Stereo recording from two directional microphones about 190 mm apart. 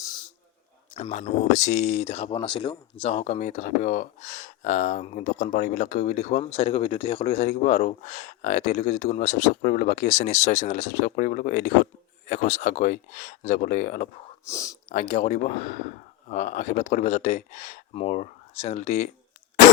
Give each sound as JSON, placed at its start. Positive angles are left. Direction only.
{"t": 0.9, "sound": "speech", "side_deg": 30}
{"t": 3.0, "sound": "speech", "side_deg": 35}
{"t": 14.4, "sound": "speech", "side_deg": 15}
{"t": 14.8, "sound": "speech", "side_deg": 40}